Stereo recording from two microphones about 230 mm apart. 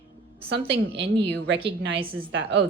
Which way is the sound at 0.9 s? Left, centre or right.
Right.